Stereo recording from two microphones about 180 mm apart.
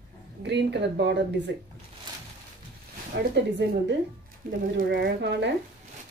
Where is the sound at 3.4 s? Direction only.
75° right (ahead or behind).